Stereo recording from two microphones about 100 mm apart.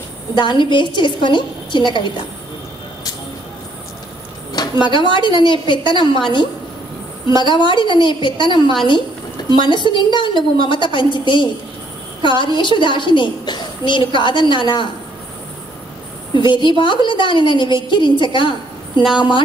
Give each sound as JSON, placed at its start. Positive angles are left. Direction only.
{"t": 0.4, "sound": "a woman's voice", "side_deg": 50}
{"t": 4.6, "sound": "a woman's voice", "side_deg": 50}
{"t": 16.3, "sound": "a woman's voice", "side_deg": 55}